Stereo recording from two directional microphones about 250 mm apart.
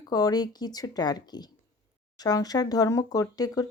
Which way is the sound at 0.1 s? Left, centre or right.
Centre.